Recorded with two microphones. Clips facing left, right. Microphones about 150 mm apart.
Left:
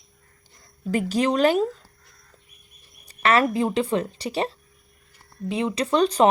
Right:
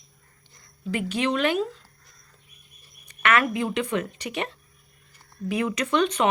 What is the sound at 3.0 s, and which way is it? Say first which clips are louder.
Speech: left 3 dB; 35° left (ahead or behind).